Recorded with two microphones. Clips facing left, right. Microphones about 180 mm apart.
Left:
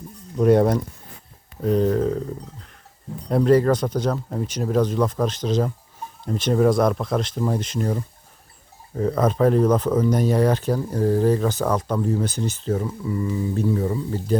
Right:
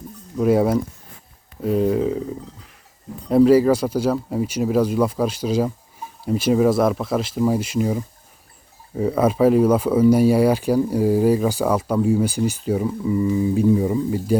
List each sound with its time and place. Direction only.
0.3 s speech: 5° right (ahead or behind)